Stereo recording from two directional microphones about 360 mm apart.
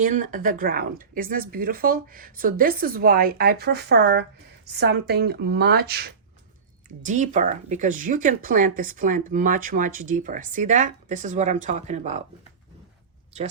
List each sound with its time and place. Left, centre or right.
0.0 s speech: right
13.3 s speech: centre